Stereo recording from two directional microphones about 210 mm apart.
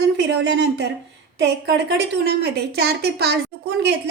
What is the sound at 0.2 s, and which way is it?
A woman's voice, 55° right (ahead or behind).